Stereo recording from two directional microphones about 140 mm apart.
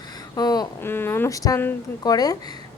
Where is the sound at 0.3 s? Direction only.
30° left (ahead or behind).